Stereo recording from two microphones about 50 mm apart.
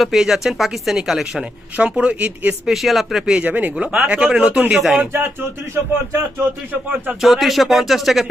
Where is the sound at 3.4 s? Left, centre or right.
Right.